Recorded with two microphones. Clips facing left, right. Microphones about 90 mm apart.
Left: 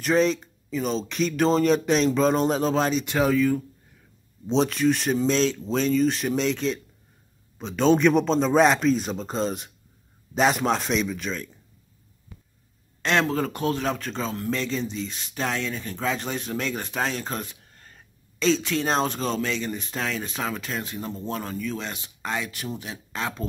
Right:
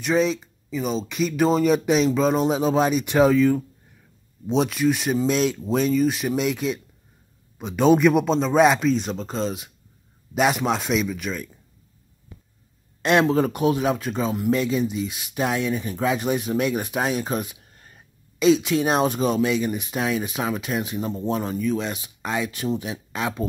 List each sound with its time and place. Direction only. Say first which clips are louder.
0.0 s speech: even; centre (ahead or behind)
3.2 s speech: right 5 dB; 25° right (ahead or behind)
4.5 s a man's voice: right 1 dB; 10° right (ahead or behind)
13.0 s a man's voice: right 5 dB; 15° right (ahead or behind)